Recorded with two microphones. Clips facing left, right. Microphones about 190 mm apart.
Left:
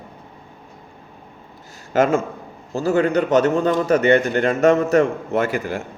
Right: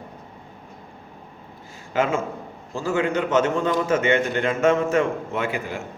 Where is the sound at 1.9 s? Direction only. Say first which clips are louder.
Left 5 dB; 45° left (ahead or behind).